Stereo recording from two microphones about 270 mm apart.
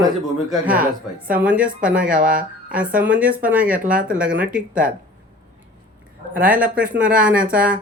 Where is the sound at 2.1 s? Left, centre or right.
Right.